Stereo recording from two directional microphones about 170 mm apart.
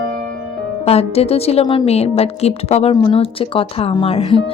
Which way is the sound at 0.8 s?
35° left (ahead or behind).